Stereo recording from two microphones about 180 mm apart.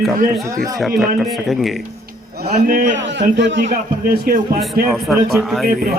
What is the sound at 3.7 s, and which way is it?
Speech, 55° right (ahead or behind).